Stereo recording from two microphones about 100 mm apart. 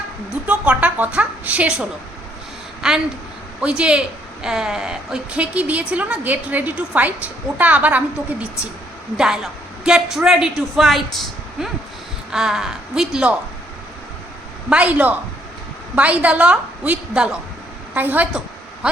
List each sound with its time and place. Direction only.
0.4 s a woman's voice: 10° right (ahead or behind)
14.7 s a woman's voice: 15° right (ahead or behind)
17.9 s a sound: 20° right (ahead or behind)